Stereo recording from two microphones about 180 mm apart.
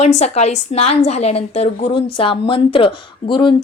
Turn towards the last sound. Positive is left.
turn(degrees=25)  # may be behind; listen again after turning